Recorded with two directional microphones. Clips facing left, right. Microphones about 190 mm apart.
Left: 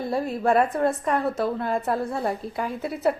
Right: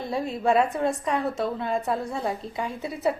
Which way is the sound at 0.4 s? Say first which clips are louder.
Left 1 dB; centre (ahead or behind).